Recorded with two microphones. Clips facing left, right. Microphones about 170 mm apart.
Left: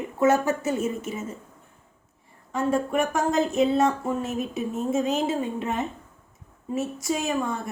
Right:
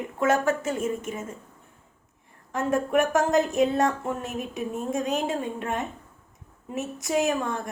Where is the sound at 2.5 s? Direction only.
Centre (ahead or behind).